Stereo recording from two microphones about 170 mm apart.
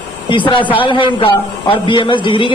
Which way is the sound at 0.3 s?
30° left (ahead or behind).